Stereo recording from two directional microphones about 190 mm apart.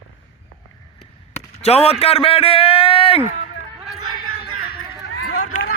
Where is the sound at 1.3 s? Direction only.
35° left (ahead or behind).